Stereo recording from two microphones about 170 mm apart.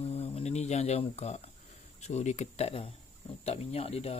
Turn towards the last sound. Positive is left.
turn(degrees=35)  # may be behind; listen again after turning